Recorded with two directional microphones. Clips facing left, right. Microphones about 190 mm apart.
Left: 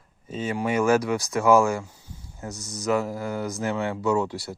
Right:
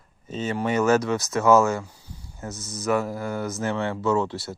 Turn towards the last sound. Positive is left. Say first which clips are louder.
# right 1 dB
turn(degrees=15)  # may be behind; listen again after turning